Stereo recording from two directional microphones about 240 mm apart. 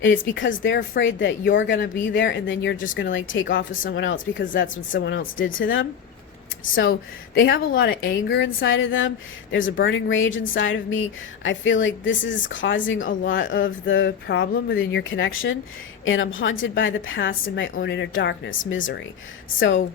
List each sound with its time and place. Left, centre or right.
0.3 s a woman's voice: left
3.7 s speech: left
4.0 s a woman's voice: left
7.3 s a woman's voice: left